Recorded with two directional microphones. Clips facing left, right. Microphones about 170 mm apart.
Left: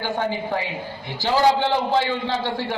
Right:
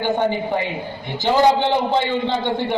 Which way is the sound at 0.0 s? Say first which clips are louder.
Right 5 dB; 20° right (ahead or behind).